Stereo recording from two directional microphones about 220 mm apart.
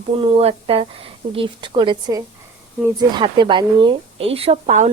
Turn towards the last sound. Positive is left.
turn(degrees=-30)  # may be behind; listen again after turning